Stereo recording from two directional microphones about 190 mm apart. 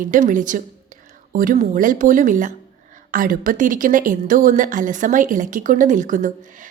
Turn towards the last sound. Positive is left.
turn(degrees=-40)  # may be behind; listen again after turning